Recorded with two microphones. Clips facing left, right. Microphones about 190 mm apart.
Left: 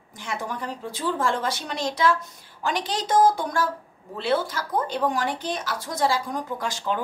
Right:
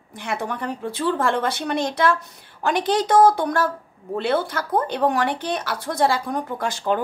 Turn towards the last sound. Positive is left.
turn(degrees=-55)  # may be behind; listen again after turning